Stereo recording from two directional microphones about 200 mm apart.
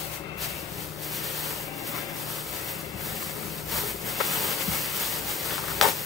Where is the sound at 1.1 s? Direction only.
Centre (ahead or behind).